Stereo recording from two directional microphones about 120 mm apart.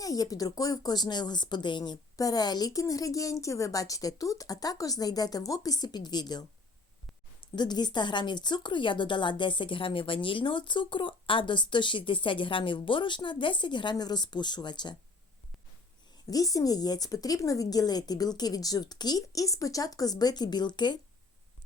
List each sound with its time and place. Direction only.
0.0 s speech: 30° left (ahead or behind)
7.4 s speech: 40° left (ahead or behind)
16.3 s speech: 30° left (ahead or behind)